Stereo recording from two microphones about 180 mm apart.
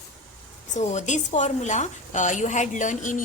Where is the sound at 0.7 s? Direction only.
40° left (ahead or behind).